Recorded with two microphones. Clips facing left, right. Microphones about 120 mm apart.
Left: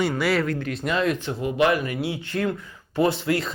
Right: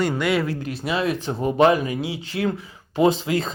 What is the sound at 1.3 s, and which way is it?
Speech, 35° right (ahead or behind).